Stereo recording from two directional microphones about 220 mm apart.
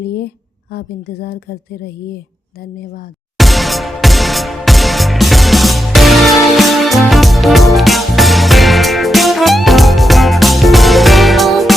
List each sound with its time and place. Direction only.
0.7 s a woman's voice: 45° left (ahead or behind)
3.3 s music: centre (ahead or behind)